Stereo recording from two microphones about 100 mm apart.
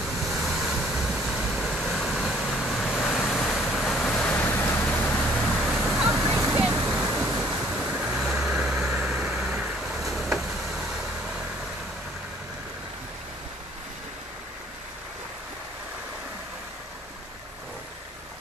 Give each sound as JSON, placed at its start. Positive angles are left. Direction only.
{"t": 0.0, "sound": "waves", "side_deg": 0}
{"t": 2.5, "sound": "vehicle", "side_deg": 5}
{"t": 5.5, "sound": "vehicle", "side_deg": 0}
{"t": 6.3, "sound": "a sound", "side_deg": -15}
{"t": 7.6, "sound": "vehicle", "side_deg": -10}